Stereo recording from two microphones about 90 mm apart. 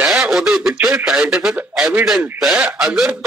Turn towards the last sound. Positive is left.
turn(degrees=-5)  # may be behind; listen again after turning